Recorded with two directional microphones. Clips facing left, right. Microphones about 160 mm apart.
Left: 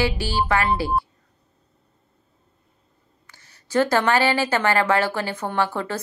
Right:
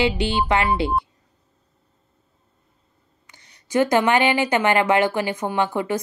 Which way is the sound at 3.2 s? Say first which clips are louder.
Right 1 dB; 15° right (ahead or behind).